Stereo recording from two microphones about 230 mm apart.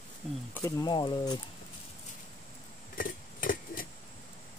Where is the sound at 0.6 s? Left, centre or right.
Centre.